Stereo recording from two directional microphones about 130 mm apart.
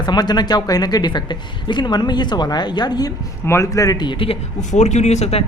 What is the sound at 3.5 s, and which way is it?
Speech, 25° left (ahead or behind).